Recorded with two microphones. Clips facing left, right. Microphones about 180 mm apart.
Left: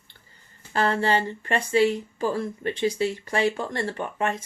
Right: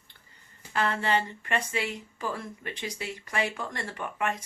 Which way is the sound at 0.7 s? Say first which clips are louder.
Left 5 dB; 30° left (ahead or behind).